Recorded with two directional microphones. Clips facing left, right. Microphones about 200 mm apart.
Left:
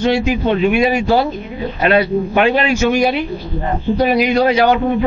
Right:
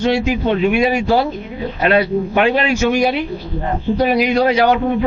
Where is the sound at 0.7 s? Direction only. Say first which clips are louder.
Left 1 dB; 15° left (ahead or behind).